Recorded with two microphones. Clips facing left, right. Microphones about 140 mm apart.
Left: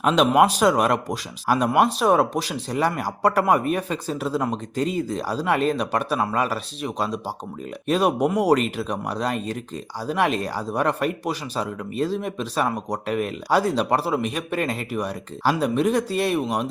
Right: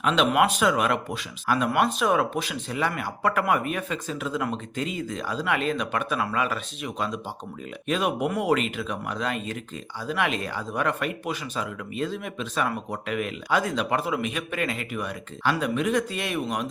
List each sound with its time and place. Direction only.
0.0 s speech: 40° left (ahead or behind)